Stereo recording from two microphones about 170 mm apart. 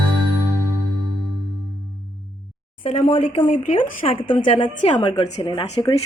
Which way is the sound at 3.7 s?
35° left (ahead or behind).